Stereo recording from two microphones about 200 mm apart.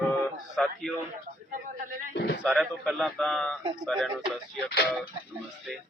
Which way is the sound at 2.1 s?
50° left (ahead or behind).